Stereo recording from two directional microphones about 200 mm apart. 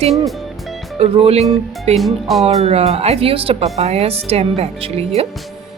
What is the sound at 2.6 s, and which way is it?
A woman's voice, 30° right (ahead or behind).